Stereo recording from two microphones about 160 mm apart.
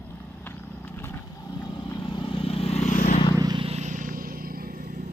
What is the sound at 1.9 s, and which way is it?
Vehicle, 30° left (ahead or behind).